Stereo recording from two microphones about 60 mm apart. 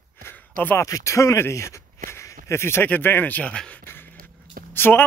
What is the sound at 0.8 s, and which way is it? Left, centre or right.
Speech, left.